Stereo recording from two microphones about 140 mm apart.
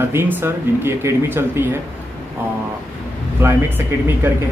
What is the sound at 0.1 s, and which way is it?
A man's voice, 15° right (ahead or behind).